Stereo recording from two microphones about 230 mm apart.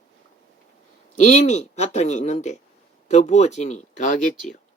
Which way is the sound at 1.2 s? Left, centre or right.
Left.